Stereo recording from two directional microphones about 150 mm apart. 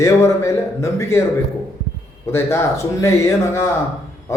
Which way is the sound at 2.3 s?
20° left (ahead or behind).